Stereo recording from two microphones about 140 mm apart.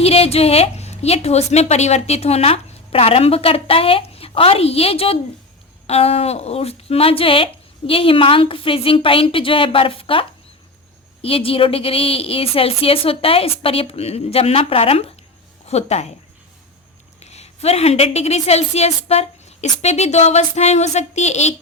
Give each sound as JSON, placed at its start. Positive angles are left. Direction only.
{"t": 0.0, "sound": "a woman's voice", "side_deg": 45}
{"t": 17.2, "sound": "a woman's voice", "side_deg": 50}